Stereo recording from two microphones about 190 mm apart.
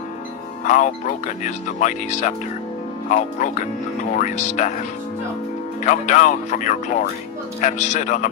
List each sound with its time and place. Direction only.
0.6 s speech: 40° left (ahead or behind)
5.8 s speech: 40° left (ahead or behind)